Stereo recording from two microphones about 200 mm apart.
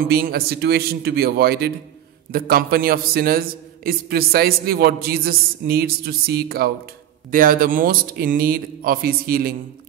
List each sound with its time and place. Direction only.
0.0 s a man's voice: 50° right (ahead or behind)